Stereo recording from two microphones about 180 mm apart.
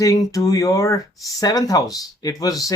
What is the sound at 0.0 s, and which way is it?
Speech, 20° left (ahead or behind).